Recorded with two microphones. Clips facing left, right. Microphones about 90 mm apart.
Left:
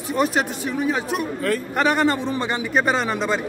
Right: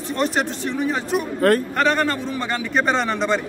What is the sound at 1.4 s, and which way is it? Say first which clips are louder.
Speech: right 8 dB; 55° right (ahead or behind).